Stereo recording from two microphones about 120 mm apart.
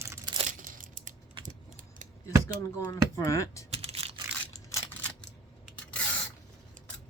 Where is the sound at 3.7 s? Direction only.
55° right (ahead or behind).